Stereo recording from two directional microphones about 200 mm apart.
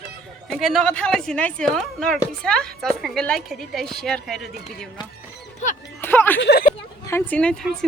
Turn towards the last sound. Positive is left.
turn(degrees=5)  # may be behind; listen again after turning